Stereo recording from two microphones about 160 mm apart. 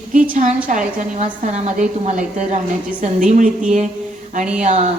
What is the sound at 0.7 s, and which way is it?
A woman's voice, 50° right (ahead or behind).